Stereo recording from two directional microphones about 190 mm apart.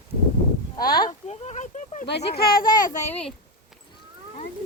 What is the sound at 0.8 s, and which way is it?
Speech, 50° left (ahead or behind).